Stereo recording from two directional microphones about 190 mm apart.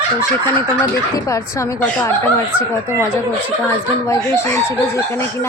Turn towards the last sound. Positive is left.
turn(degrees=15)  # may be behind; listen again after turning